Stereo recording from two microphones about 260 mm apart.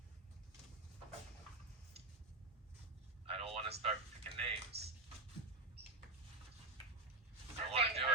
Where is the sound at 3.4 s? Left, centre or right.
Right.